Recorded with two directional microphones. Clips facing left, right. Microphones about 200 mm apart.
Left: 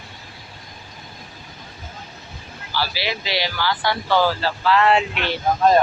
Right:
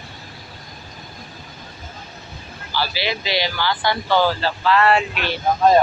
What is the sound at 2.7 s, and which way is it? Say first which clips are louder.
Speech: right 1 dB; 5° left (ahead or behind).